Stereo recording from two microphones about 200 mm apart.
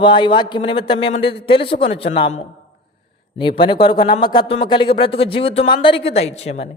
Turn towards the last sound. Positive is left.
turn(degrees=35)  # may be behind; listen again after turning